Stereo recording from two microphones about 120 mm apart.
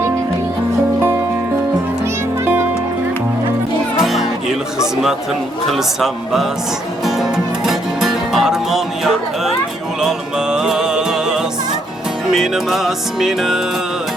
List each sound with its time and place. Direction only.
2.4 s music: 20° right (ahead or behind)
3.9 s music: centre (ahead or behind)
5.7 s music: centre (ahead or behind)